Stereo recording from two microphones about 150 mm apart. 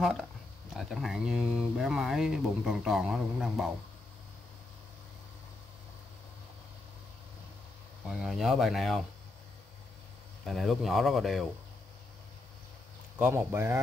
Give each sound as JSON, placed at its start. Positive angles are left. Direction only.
{"t": 0.0, "sound": "speech", "side_deg": 0}
{"t": 8.1, "sound": "speech", "side_deg": 0}
{"t": 10.4, "sound": "speech", "side_deg": 0}
{"t": 13.2, "sound": "speech", "side_deg": -15}